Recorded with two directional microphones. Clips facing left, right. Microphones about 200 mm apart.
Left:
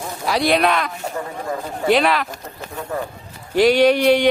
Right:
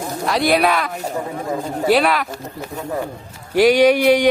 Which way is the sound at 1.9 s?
5° right (ahead or behind).